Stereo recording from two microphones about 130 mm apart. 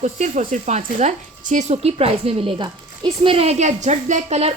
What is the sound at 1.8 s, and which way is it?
A woman's voice, 50° right (ahead or behind).